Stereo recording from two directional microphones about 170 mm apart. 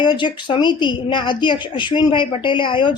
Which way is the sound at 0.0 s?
25° left (ahead or behind).